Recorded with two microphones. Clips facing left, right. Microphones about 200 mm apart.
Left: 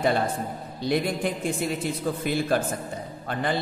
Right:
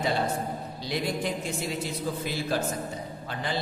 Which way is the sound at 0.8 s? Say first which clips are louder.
Left 5 dB; 55° left (ahead or behind).